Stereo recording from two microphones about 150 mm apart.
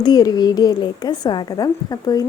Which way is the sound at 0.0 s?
25° left (ahead or behind).